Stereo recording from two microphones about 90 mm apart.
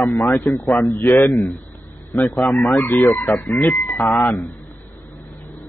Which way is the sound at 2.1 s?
Centre (ahead or behind).